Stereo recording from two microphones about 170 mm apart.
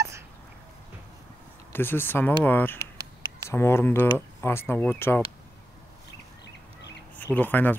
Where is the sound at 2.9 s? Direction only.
20° right (ahead or behind).